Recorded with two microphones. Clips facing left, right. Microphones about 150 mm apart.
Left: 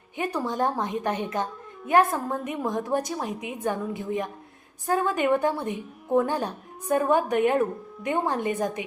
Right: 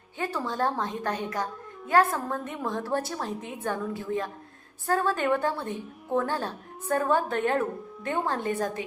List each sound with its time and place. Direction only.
0.2 s a child's voice: 15° left (ahead or behind)